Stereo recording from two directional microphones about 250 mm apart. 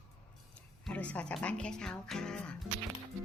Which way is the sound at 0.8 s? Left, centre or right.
Centre.